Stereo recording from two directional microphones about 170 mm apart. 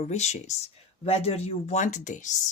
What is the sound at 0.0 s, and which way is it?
Speech, 40° left (ahead or behind).